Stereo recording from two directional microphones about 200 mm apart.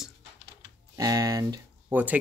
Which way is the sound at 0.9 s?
15° right (ahead or behind).